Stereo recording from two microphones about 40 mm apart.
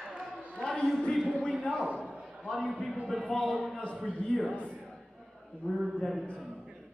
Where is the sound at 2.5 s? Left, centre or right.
Centre.